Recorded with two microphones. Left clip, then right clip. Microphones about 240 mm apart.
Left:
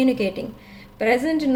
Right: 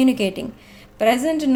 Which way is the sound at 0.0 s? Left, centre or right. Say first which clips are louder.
Right 2 dB; right.